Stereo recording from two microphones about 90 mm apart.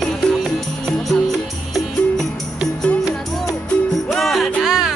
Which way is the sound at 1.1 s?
Centre (ahead or behind).